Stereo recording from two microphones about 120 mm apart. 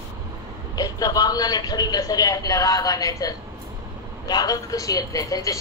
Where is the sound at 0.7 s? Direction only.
30° left (ahead or behind).